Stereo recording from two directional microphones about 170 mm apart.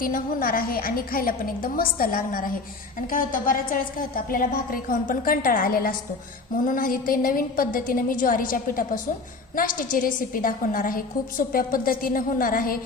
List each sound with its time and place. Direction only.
0.0 s a woman's voice: 60° left (ahead or behind)